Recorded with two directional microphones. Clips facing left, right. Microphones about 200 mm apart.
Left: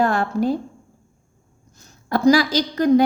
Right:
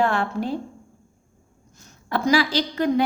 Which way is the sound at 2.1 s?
40° left (ahead or behind).